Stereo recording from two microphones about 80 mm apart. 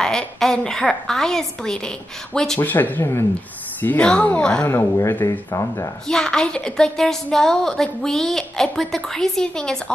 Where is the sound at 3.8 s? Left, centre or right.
Centre.